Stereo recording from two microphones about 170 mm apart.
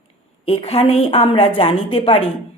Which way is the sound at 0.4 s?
35° left (ahead or behind).